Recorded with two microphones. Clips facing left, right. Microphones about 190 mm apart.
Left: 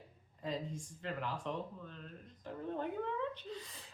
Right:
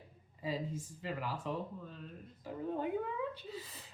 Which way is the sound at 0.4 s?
5° right (ahead or behind).